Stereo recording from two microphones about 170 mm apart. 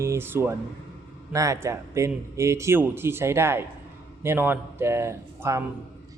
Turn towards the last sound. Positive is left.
turn(degrees=-15)  # may be behind; listen again after turning